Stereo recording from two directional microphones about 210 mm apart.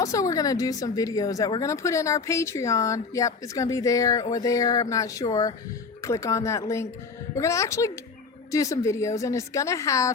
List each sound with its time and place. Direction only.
0.0 s speech: 15° left (ahead or behind)